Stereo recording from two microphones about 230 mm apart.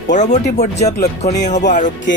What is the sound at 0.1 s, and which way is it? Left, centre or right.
Speech, left.